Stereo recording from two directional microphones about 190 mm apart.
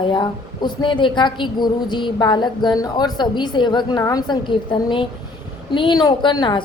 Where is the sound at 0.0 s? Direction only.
25° left (ahead or behind).